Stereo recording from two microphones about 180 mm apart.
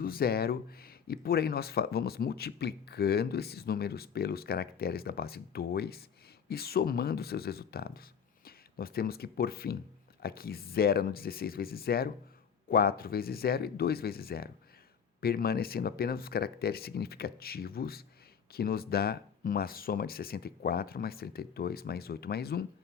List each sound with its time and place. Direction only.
0.0 s speech: 55° left (ahead or behind)